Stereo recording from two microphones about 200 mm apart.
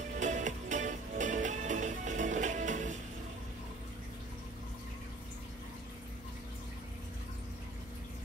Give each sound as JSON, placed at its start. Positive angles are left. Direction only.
{"t": 0.2, "sound": "music", "side_deg": -40}